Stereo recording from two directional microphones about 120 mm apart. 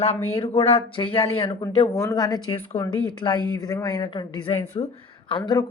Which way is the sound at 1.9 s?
30° left (ahead or behind).